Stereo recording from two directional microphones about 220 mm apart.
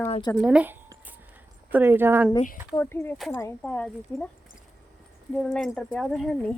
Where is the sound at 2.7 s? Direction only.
10° left (ahead or behind).